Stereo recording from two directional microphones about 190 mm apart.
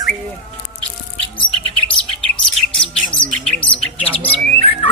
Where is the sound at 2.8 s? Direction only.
5° left (ahead or behind).